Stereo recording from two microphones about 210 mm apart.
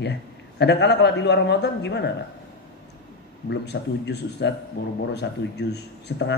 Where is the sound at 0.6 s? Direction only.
55° left (ahead or behind).